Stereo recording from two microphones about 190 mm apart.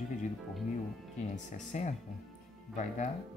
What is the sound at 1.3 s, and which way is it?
Speech, 40° left (ahead or behind).